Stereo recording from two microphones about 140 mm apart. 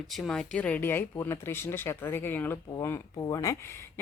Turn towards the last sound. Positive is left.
turn(degrees=20)  # may be behind; listen again after turning